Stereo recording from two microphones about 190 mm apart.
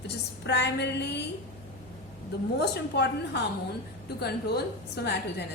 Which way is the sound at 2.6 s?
60° left (ahead or behind).